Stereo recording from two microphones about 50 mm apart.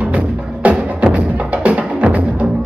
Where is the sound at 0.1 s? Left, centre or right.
Right.